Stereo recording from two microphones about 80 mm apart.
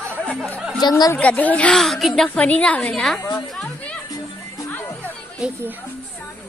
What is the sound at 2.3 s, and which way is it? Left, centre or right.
Speech, centre.